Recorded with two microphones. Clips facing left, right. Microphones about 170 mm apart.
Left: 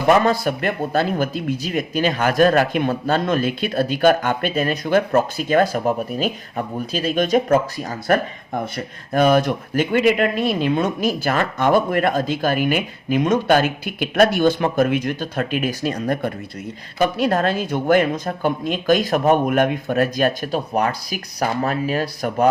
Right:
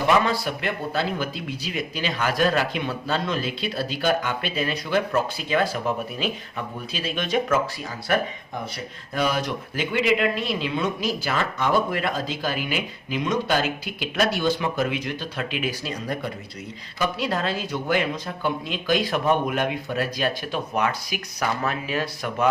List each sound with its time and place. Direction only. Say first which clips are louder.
0.1 s speech: left 7 dB; 45° left (ahead or behind)